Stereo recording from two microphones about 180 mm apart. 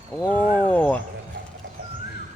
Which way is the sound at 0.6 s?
10° left (ahead or behind).